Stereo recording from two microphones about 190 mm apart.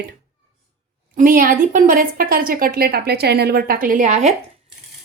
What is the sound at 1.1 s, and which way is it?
A woman's voice, 45° right (ahead or behind).